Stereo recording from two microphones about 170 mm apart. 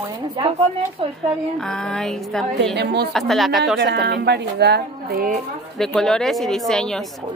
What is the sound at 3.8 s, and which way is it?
A woman's voice, 90° right.